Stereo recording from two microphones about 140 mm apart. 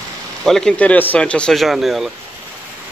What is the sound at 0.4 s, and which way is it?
Speech, 5° left (ahead or behind).